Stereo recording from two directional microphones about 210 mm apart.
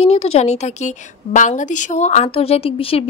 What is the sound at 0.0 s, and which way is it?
Speech, 30° left (ahead or behind).